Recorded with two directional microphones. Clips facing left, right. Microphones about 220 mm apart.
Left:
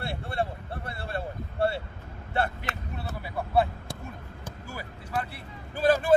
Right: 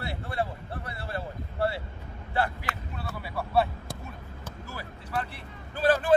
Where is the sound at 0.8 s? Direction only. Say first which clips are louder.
Left 2 dB; 30° left (ahead or behind).